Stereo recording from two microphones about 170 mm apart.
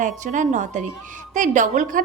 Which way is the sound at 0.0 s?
45° right (ahead or behind).